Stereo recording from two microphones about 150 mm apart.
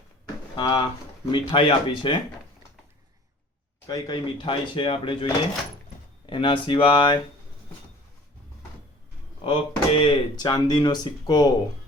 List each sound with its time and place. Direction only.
0.5 s speech: 30° left (ahead or behind)
3.8 s speech: 25° left (ahead or behind)
9.4 s speech: 35° left (ahead or behind)